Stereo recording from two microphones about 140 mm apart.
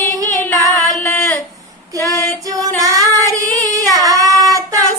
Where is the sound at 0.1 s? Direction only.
25° right (ahead or behind).